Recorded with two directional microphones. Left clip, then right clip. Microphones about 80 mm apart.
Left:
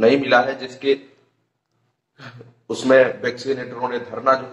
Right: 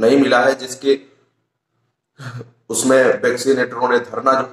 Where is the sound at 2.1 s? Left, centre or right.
Right.